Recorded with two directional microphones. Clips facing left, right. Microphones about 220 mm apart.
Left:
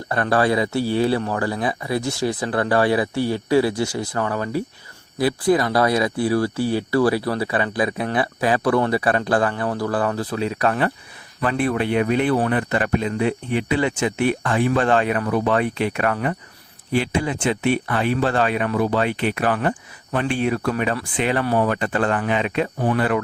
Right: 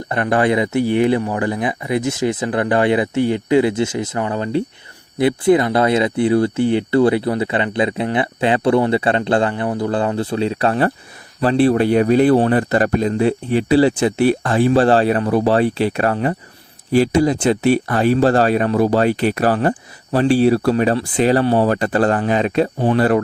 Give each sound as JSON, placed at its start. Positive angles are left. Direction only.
{"t": 0.1, "sound": "speech", "side_deg": -20}